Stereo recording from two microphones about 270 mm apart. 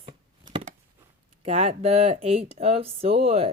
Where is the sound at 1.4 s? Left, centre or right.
Right.